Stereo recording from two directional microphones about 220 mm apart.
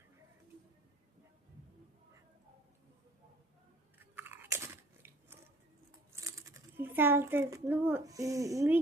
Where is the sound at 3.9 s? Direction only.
10° right (ahead or behind).